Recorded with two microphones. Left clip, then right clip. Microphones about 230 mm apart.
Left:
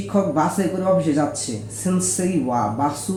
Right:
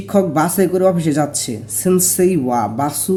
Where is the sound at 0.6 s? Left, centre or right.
Right.